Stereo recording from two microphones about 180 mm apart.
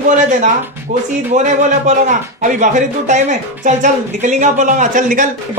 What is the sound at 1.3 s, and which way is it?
A man's voice, 45° right (ahead or behind).